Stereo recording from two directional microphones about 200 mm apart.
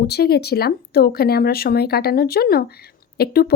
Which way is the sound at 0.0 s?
55° left (ahead or behind).